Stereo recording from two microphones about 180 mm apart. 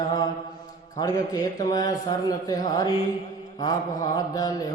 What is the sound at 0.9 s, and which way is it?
A man's voice, 20° left (ahead or behind).